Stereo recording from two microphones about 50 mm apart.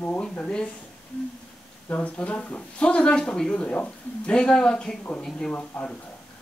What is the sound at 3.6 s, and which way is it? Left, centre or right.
Speech, left.